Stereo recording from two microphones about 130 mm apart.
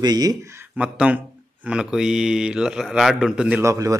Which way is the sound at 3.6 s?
25° right (ahead or behind).